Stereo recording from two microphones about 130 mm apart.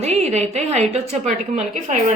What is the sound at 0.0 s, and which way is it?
A woman's voice, 60° right (ahead or behind).